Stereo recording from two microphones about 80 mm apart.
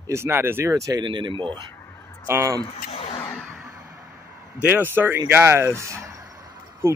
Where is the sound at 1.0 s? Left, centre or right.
Right.